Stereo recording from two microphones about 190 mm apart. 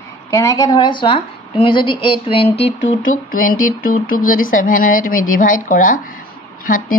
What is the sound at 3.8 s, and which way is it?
Speech, 45° left (ahead or behind).